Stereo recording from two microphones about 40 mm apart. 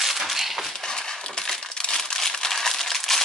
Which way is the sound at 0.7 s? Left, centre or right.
Centre.